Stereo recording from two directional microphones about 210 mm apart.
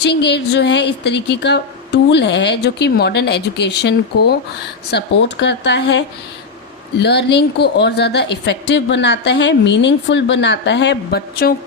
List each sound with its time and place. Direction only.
0.0 s a woman's voice: 55° left (ahead or behind)